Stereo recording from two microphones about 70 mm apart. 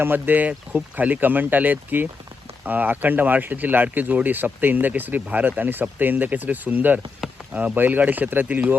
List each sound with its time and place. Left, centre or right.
0.0 s speech: right